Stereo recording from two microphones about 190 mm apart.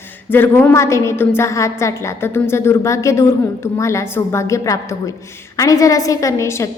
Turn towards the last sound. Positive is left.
turn(degrees=15)  # may be behind; listen again after turning